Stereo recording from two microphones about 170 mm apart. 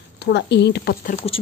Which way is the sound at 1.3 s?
35° left (ahead or behind).